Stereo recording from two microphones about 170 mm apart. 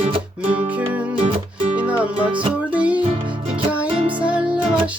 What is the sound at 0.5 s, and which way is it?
Music, 10° right (ahead or behind).